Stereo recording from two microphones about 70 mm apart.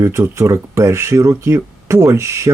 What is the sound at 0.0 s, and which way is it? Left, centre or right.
Speech, right.